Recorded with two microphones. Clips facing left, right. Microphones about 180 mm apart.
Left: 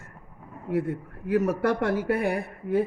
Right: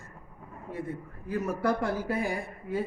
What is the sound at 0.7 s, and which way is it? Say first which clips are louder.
Speech: left 9 dB; 75° left (ahead or behind).